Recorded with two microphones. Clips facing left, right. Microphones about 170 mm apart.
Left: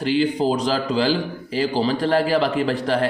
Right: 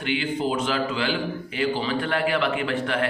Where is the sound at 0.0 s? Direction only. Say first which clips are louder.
Left 6 dB; 35° left (ahead or behind).